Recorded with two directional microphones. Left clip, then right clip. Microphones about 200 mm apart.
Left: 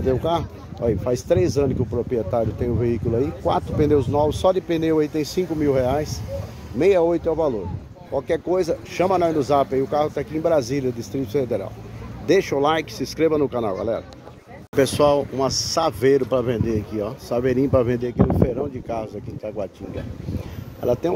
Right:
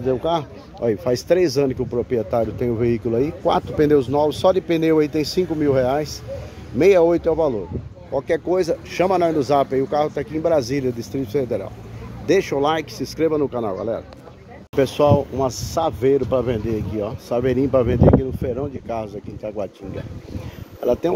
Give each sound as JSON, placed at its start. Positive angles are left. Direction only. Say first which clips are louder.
{"t": 0.0, "sound": "a man's voice", "louder": "right 1 dB", "side_deg": -5}
{"t": 18.9, "sound": "a man's voice", "louder": "right 1 dB", "side_deg": -10}
{"t": 20.8, "sound": "a man's voice", "louder": "right 2 dB", "side_deg": -10}